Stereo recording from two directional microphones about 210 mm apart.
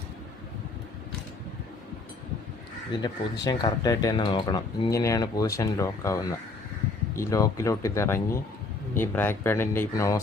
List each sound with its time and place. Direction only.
3.4 s speech: 20° left (ahead or behind)